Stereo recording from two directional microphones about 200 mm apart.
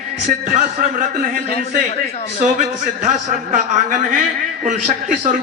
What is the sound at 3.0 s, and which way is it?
A man's voice, 40° right (ahead or behind).